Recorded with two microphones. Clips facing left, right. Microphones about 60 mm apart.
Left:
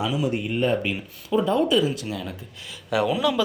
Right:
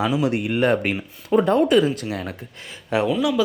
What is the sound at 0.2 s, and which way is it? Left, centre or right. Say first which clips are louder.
Speech: right 3 dB; right.